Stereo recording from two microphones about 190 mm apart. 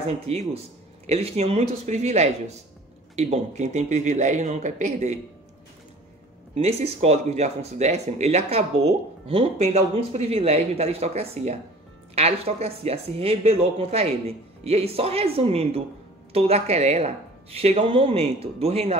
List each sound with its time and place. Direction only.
0.3 s speech: 30° right (ahead or behind)
6.5 s speech: 35° right (ahead or behind)